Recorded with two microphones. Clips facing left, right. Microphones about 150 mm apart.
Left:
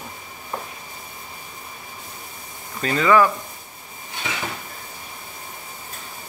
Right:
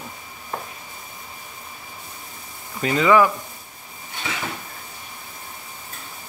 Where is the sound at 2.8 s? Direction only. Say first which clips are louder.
Right 1 dB; 15° right (ahead or behind).